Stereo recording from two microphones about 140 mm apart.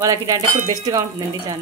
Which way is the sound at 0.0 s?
25° right (ahead or behind).